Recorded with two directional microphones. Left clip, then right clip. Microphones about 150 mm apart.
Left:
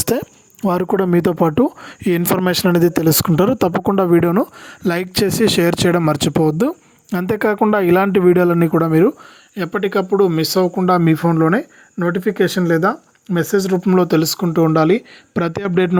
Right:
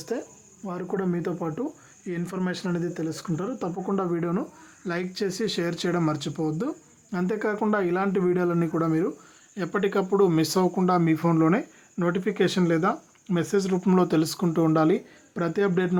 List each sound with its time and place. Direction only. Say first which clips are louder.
0.0 s speech: left 12 dB; 90° left; by 9.1 s 60° left (ahead or behind)
9.6 s speech: left 7 dB; 45° left (ahead or behind)
10.8 s speech: left 8 dB; 50° left (ahead or behind)
11.3 s speech: left 7 dB; 35° left (ahead or behind); by 15.9 s 50° left (ahead or behind)